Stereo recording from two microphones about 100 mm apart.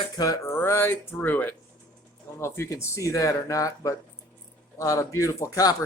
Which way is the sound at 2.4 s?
25° left (ahead or behind).